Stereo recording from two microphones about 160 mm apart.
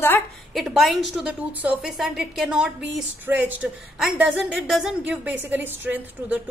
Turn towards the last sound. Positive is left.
turn(degrees=-10)  # may be behind; listen again after turning